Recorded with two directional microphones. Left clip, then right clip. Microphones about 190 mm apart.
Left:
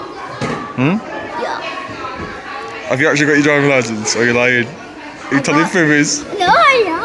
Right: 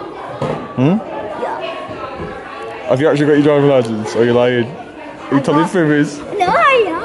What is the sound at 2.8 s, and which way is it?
Speech, 20° right (ahead or behind).